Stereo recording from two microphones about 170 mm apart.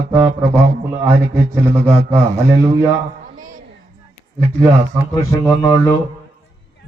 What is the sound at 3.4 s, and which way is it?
Speech, 50° right (ahead or behind).